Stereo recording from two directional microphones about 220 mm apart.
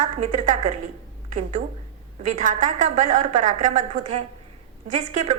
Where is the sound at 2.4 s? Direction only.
35° right (ahead or behind).